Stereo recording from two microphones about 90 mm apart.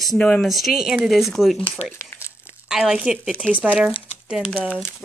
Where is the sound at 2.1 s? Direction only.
30° left (ahead or behind).